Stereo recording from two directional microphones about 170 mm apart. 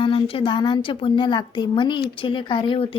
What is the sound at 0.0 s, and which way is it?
A woman's voice, 30° left (ahead or behind).